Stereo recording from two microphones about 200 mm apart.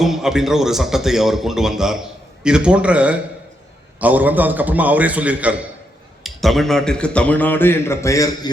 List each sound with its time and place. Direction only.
0.0 s a man's voice: centre (ahead or behind); by 8.4 s 15° left (ahead or behind)